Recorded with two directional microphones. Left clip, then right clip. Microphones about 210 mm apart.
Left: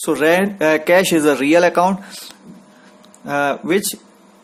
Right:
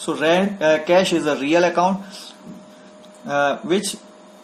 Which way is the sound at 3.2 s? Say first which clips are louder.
Left 1 dB; 50° left (ahead or behind).